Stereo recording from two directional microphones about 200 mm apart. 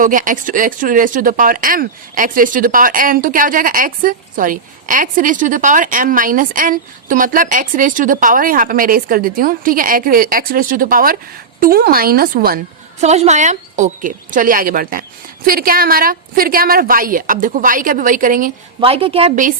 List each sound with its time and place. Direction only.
0.0 s speech: 40° right (ahead or behind)
13.0 s speech: 35° right (ahead or behind)
18.8 s a woman's voice: 30° right (ahead or behind)